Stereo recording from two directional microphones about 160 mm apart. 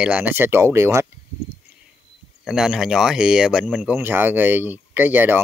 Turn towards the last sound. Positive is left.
turn(degrees=-10)  # may be behind; listen again after turning